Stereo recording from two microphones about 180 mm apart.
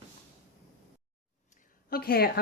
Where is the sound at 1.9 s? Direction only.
60° left (ahead or behind).